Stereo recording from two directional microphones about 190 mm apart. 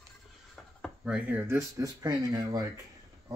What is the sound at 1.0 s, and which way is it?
Speech, 5° right (ahead or behind).